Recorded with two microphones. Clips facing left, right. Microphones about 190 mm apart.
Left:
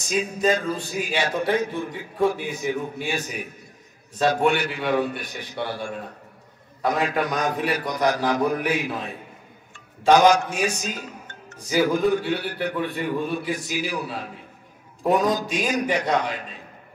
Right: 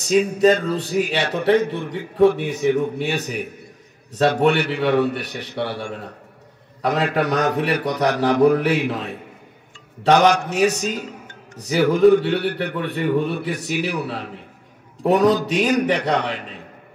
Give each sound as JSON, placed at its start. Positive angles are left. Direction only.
{"t": 0.1, "sound": "a man's voice", "side_deg": -65}